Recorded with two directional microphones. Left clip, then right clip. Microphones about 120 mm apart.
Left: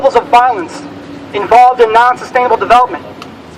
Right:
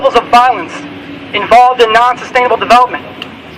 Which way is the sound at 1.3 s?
20° left (ahead or behind).